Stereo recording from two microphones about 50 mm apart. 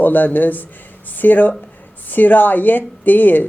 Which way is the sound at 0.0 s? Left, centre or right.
Left.